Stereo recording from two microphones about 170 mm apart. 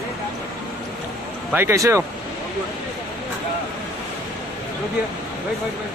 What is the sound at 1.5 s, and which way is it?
Speech, 15° right (ahead or behind).